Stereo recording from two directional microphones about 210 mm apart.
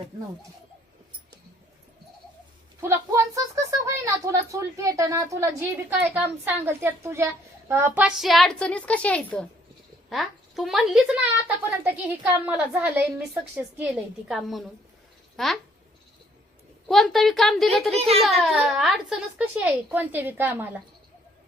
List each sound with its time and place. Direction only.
2.8 s speech: 15° right (ahead or behind)
16.9 s speech: centre (ahead or behind)
17.9 s a child's voice: 30° right (ahead or behind)
18.2 s speech: centre (ahead or behind)